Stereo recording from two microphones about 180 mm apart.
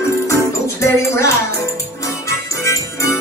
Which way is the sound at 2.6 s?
15° left (ahead or behind).